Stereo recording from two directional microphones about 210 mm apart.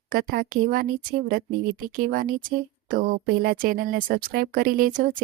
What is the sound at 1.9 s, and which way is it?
A woman's voice, 40° right (ahead or behind).